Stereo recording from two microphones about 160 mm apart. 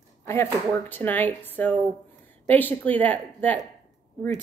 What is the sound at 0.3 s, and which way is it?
A woman's voice, 15° left (ahead or behind).